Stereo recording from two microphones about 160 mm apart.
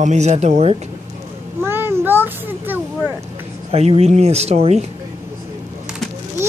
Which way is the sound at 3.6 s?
40° right (ahead or behind).